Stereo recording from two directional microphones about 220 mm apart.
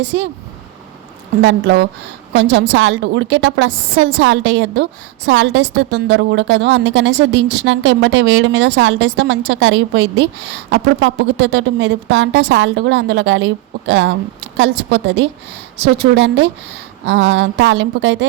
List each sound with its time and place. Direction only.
0.0 s a woman's voice: 55° right (ahead or behind)
1.4 s a woman's voice: 50° right (ahead or behind)